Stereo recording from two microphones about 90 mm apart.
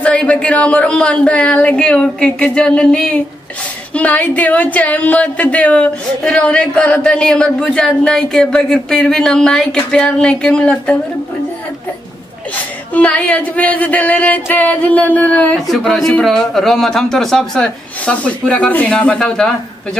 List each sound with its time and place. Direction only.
0.0 s speech: 15° left (ahead or behind)
12.9 s speech: 15° left (ahead or behind)
15.7 s speech: 5° left (ahead or behind)